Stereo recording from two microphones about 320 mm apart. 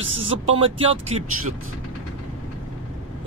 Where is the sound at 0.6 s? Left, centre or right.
Centre.